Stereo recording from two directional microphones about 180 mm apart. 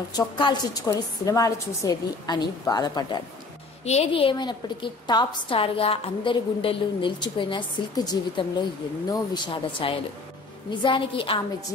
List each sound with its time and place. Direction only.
0.1 s a woman's voice: 25° left (ahead or behind)
3.8 s a woman's voice: 35° left (ahead or behind)